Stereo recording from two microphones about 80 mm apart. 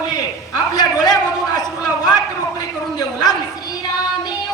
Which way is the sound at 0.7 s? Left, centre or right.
Left.